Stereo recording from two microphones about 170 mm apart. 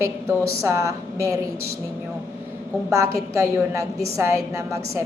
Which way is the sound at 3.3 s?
20° right (ahead or behind).